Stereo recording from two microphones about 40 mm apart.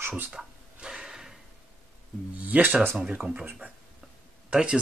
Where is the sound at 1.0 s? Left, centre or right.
Centre.